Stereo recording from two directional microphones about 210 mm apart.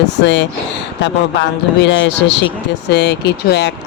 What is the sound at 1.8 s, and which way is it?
Speech, 60° left (ahead or behind).